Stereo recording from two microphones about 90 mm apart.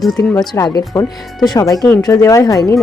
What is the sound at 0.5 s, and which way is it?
Speech, 45° left (ahead or behind).